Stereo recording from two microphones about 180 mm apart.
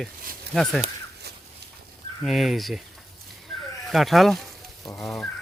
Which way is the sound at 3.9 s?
Centre (ahead or behind).